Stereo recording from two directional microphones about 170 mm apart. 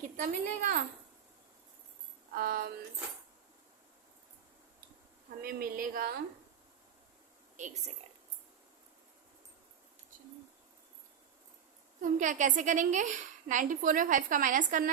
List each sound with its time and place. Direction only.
0.2 s a woman's voice: 55° right (ahead or behind)
2.3 s a woman's voice: 60° right (ahead or behind)
5.4 s a woman's voice: 60° right (ahead or behind)
7.5 s a woman's voice: 45° right (ahead or behind)
12.0 s a woman's voice: 50° right (ahead or behind)